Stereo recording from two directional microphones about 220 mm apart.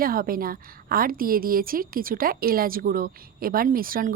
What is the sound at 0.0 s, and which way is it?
A woman's voice, 40° right (ahead or behind).